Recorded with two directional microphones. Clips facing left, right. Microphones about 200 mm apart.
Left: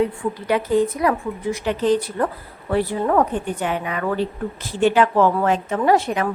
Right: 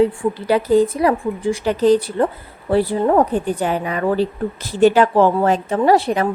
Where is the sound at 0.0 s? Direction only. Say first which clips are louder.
Right 5 dB; 30° right (ahead or behind).